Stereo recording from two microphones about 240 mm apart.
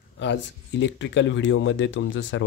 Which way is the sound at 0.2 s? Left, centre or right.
Left.